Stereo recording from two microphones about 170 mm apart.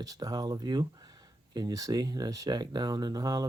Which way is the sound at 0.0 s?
20° right (ahead or behind).